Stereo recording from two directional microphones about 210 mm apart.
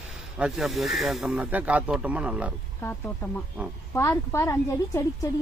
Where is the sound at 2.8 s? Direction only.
10° left (ahead or behind).